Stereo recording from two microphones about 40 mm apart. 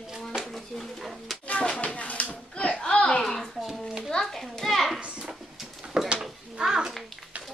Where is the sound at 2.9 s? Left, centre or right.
Left.